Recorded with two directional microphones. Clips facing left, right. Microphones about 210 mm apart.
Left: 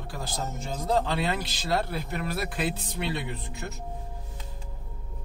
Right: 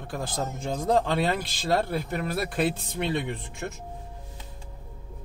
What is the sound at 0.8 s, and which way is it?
A man's voice, 50° right (ahead or behind).